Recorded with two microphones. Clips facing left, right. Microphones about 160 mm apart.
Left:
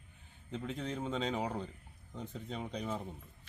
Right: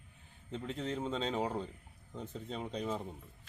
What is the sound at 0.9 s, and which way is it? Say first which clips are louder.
A man's voice: right 1 dB; centre (ahead or behind).